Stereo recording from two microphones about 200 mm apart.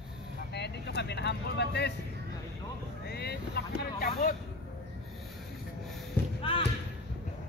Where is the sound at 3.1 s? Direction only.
55° left (ahead or behind).